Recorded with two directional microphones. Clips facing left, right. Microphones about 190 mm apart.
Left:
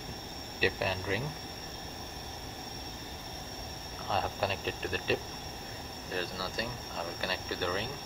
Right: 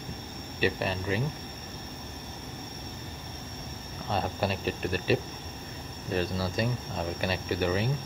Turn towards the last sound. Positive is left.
turn(degrees=-15)  # may be behind; listen again after turning